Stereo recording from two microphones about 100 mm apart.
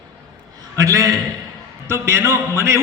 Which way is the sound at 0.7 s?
35° right (ahead or behind).